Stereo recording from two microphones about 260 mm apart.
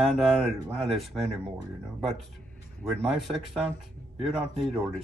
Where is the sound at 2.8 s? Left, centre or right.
Centre.